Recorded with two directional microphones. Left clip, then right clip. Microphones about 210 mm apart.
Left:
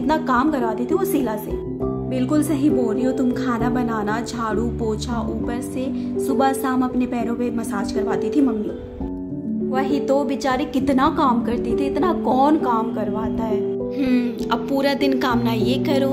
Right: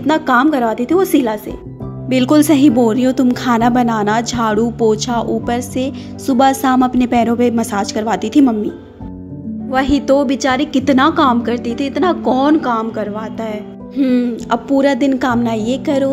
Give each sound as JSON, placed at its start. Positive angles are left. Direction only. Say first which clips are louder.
{"t": 0.0, "sound": "a woman's voice", "louder": "right 6 dB", "side_deg": -20}
{"t": 2.0, "sound": "speech", "louder": "right 11 dB", "side_deg": -45}
{"t": 9.7, "sound": "a woman's voice", "louder": "right 7 dB", "side_deg": -25}